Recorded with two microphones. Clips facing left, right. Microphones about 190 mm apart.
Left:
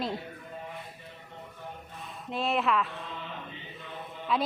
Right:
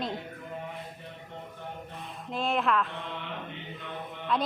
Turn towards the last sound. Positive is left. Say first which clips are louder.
# even
turn(degrees=5)  # may be behind; listen again after turning